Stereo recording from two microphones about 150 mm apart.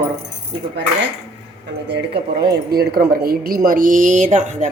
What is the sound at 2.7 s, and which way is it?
Speech, 85° right.